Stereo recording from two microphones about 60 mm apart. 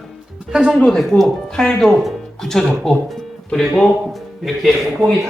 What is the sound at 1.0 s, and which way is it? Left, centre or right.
Speech, centre.